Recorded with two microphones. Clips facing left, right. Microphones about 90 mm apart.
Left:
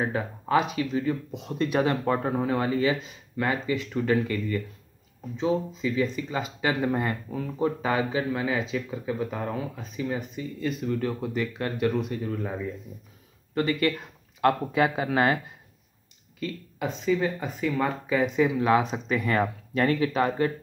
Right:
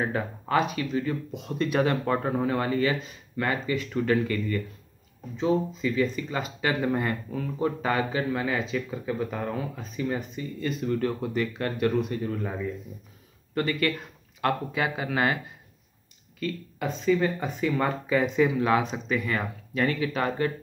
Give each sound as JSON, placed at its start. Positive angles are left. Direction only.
{"t": 0.0, "sound": "speech", "side_deg": 10}
{"t": 13.6, "sound": "speech", "side_deg": 20}
{"t": 14.4, "sound": "speech", "side_deg": 30}
{"t": 16.3, "sound": "speech", "side_deg": 15}
{"t": 19.0, "sound": "speech", "side_deg": 40}
{"t": 20.2, "sound": "speech", "side_deg": 20}